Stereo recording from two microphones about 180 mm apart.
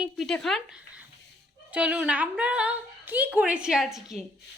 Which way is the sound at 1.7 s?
5° right (ahead or behind).